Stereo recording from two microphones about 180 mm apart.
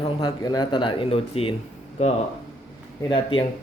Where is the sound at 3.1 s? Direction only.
30° left (ahead or behind).